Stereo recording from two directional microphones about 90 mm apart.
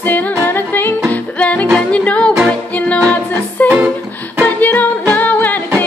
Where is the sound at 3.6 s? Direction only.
15° right (ahead or behind).